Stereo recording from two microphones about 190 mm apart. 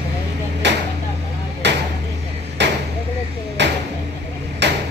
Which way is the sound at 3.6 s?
65° right (ahead or behind).